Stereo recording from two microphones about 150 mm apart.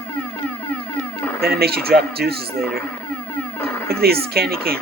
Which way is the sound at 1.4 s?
90° right.